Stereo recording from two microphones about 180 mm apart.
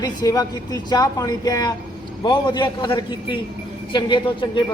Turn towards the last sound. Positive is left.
turn(degrees=25)  # may be behind; listen again after turning